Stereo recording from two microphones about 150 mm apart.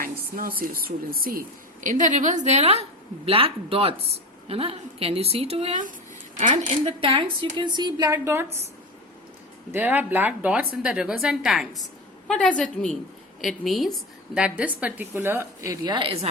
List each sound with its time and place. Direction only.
0.0 s a woman's voice: 75° right (ahead or behind); by 5.8 s 40° right (ahead or behind)
6.4 s speech: 55° right (ahead or behind)
7.0 s a woman's voice: 35° right (ahead or behind); by 8.4 s 15° right (ahead or behind)
9.7 s a woman's voice: 10° right (ahead or behind); by 16.3 s 40° right (ahead or behind)